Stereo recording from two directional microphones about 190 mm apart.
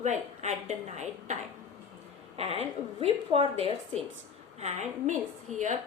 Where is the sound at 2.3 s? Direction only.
30° right (ahead or behind).